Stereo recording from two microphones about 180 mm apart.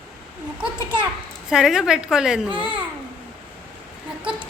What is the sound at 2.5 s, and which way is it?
Speech, 30° right (ahead or behind).